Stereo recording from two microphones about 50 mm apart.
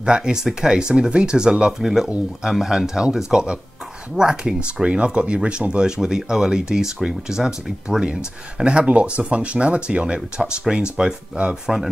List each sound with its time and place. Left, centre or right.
0.0 s speech: centre